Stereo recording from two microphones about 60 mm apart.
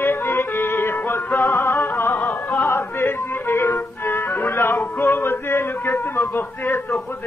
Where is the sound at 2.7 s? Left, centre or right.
Left.